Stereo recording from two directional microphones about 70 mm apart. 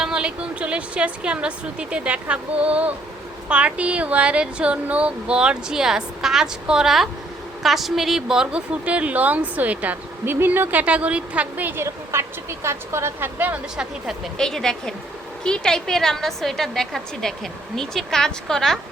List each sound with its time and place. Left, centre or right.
0.0 s a woman's voice: centre
11.9 s speech: right
14.3 s a woman's voice: centre